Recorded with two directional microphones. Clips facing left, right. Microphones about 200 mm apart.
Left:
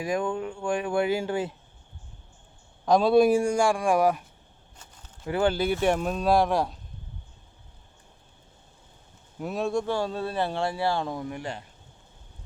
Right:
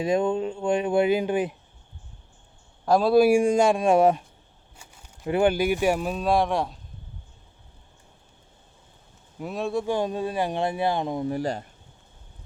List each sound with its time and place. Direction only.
0.0 s speech: 25° right (ahead or behind)
2.8 s speech: 5° right (ahead or behind)
3.3 s speech: 20° right (ahead or behind)
4.8 s speech: 15° right (ahead or behind); by 6.7 s centre (ahead or behind)
9.4 s speech: centre (ahead or behind)
9.8 s speech: 15° right (ahead or behind)
11.3 s speech: 35° right (ahead or behind)